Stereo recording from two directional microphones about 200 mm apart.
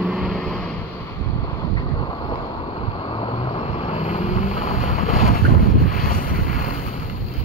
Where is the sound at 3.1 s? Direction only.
25° left (ahead or behind); by 6.2 s 45° left (ahead or behind).